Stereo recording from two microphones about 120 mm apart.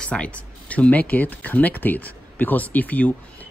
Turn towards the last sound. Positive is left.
turn(degrees=15)  # may be behind; listen again after turning